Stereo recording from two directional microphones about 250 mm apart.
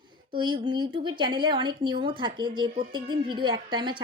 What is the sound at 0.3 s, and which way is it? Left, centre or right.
Speech, centre.